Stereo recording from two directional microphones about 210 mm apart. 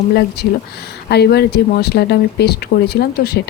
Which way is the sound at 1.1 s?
50° left (ahead or behind).